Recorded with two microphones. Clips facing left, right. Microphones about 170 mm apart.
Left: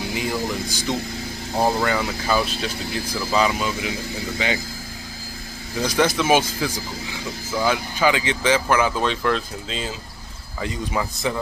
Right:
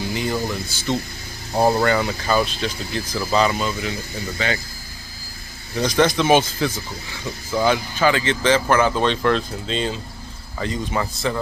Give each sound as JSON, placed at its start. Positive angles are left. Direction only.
{"t": 0.1, "sound": "speech", "side_deg": 5}
{"t": 1.8, "sound": "speech", "side_deg": 5}
{"t": 5.8, "sound": "speech", "side_deg": 10}